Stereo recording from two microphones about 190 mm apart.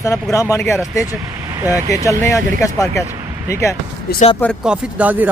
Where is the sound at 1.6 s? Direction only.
15° right (ahead or behind).